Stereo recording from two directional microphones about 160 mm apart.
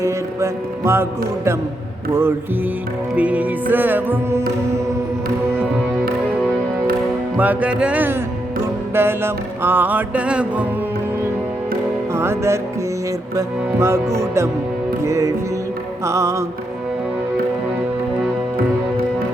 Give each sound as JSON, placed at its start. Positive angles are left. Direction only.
{"t": 0.0, "sound": "music", "side_deg": -20}
{"t": 3.2, "sound": "music", "side_deg": -10}
{"t": 7.3, "sound": "music", "side_deg": -10}
{"t": 12.1, "sound": "music", "side_deg": -15}